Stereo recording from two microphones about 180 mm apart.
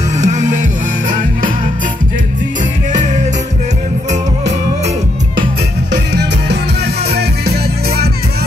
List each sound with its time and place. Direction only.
0.2 s music: 40° right (ahead or behind)
7.1 s music: 65° right (ahead or behind)